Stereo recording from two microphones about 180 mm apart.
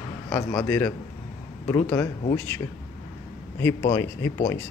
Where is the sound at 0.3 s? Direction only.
20° left (ahead or behind).